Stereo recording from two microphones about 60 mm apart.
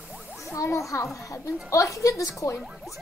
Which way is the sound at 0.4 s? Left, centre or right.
Left.